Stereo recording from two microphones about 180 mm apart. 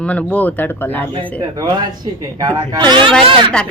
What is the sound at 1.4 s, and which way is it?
Speech, 20° right (ahead or behind).